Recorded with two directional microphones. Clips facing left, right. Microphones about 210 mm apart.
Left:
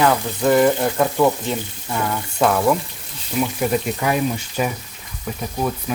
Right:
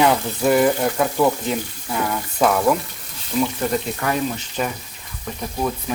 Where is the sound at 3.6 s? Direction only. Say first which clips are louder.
Left 2 dB; 10° left (ahead or behind).